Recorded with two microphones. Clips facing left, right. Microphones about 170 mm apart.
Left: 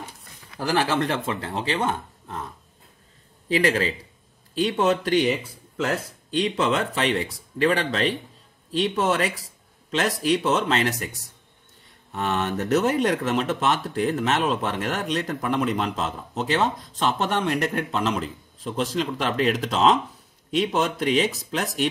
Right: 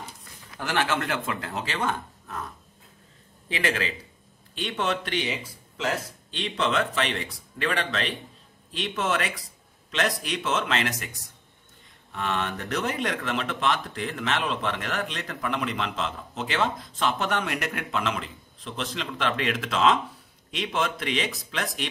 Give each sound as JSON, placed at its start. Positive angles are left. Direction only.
{"t": 0.6, "sound": "speech", "side_deg": 35}
{"t": 3.4, "sound": "speech", "side_deg": 35}
{"t": 12.1, "sound": "speech", "side_deg": 40}